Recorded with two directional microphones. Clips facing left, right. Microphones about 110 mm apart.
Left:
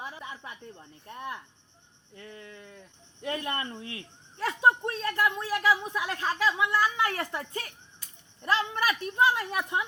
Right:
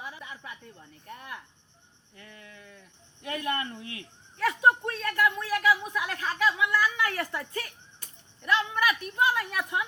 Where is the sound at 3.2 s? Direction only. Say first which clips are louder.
Right 1 dB; 30° left (ahead or behind).